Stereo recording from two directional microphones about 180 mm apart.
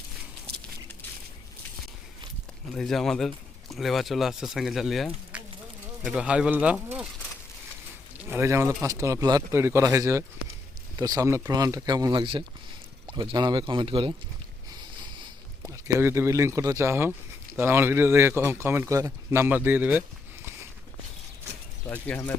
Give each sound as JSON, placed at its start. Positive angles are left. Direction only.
{"t": 2.7, "sound": "speech", "side_deg": 0}
{"t": 5.3, "sound": "a sound", "side_deg": -5}
{"t": 6.1, "sound": "speech", "side_deg": -5}
{"t": 8.2, "sound": "speech", "side_deg": -15}
{"t": 14.7, "sound": "a sound", "side_deg": -25}
{"t": 17.6, "sound": "speech", "side_deg": -10}
{"t": 21.8, "sound": "speech", "side_deg": 10}